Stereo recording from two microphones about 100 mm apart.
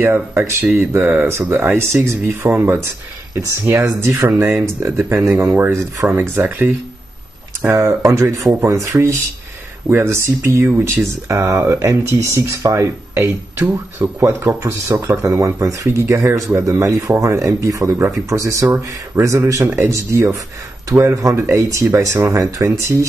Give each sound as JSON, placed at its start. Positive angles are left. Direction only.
{"t": 0.0, "sound": "speech", "side_deg": -20}